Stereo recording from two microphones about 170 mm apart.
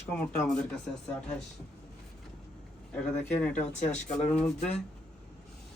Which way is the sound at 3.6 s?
40° left (ahead or behind).